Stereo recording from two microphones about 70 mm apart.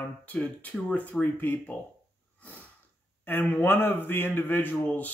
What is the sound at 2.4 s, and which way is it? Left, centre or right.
Sneeze, left.